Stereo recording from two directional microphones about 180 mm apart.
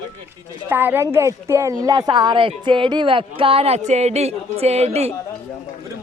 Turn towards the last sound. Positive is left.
turn(degrees=-35)  # may be behind; listen again after turning